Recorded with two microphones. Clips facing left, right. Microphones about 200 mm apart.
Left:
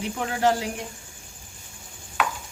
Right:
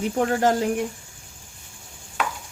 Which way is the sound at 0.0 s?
45° right (ahead or behind).